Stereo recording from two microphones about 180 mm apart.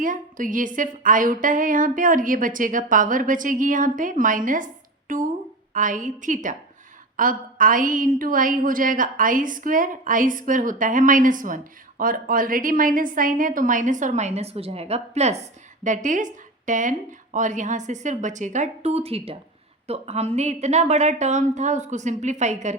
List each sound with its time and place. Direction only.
0.0 s a woman's voice: 50° right (ahead or behind)